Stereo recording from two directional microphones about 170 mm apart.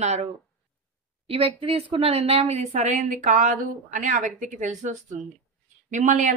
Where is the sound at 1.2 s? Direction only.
35° right (ahead or behind).